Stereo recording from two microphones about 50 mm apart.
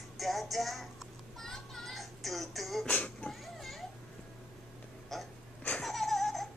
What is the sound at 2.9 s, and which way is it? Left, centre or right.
Music, left.